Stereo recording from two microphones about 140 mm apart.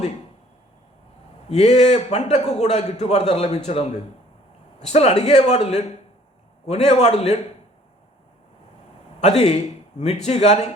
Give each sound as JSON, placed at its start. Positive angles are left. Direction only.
{"t": 1.5, "sound": "a man's voice", "side_deg": 50}
{"t": 9.2, "sound": "a man's voice", "side_deg": 50}